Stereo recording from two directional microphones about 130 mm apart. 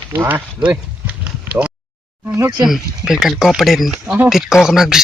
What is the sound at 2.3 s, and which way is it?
Speech, 25° right (ahead or behind).